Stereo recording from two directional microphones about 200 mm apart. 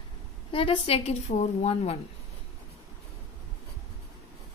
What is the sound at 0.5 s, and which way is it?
A woman's voice, 25° left (ahead or behind).